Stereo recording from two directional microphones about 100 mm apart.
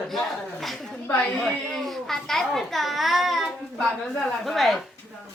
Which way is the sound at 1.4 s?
5° left (ahead or behind).